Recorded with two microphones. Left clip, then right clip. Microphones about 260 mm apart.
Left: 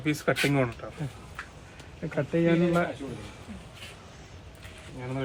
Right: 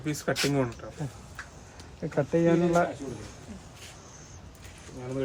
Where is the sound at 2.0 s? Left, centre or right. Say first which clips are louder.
Right 1 dB; right.